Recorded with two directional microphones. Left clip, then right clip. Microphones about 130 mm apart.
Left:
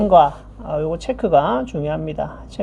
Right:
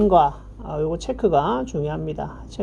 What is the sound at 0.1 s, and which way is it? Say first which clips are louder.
Speech: left 4 dB; 35° right (ahead or behind).